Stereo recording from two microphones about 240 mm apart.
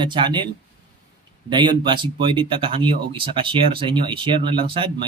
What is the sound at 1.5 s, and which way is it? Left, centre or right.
Speech, centre.